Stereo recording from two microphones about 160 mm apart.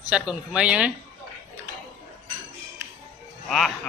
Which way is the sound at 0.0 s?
5° right (ahead or behind).